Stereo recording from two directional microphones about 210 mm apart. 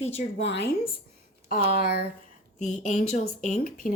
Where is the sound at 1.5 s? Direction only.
45° left (ahead or behind).